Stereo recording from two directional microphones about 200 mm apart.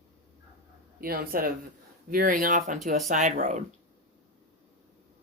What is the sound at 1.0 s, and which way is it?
Speech, 45° right (ahead or behind).